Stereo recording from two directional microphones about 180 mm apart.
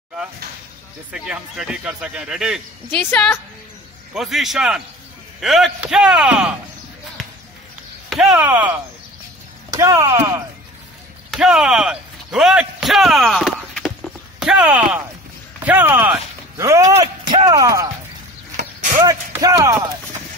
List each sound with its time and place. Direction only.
1.1 s speech: 5° right (ahead or behind)
2.9 s a woman's voice: 10° left (ahead or behind)
4.1 s speech: centre (ahead or behind)
7.2 s basketball bounce: centre (ahead or behind)
8.1 s speech: 5° right (ahead or behind)
11.2 s speech: 5° right (ahead or behind); by 17.8 s 20° right (ahead or behind)
18.6 s a sound: 45° right (ahead or behind)
18.9 s music: 15° right (ahead or behind)